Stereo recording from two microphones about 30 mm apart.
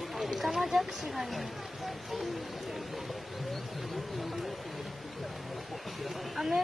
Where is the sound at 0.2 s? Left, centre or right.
Centre.